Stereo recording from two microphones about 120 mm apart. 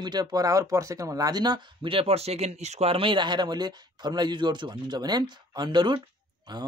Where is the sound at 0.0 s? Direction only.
35° right (ahead or behind).